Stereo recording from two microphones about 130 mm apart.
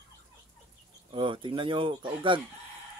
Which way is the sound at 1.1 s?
40° right (ahead or behind).